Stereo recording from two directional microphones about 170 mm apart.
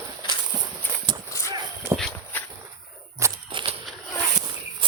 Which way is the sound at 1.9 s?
15° right (ahead or behind).